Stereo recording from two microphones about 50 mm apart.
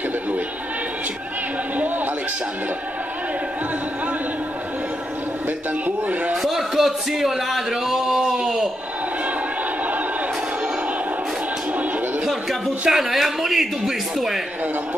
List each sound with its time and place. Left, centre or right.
5.9 s speech: right
6.3 s a man's voice: centre
12.3 s a man's voice: centre